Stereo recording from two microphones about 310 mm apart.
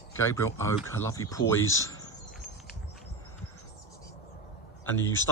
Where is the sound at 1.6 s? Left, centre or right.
Left.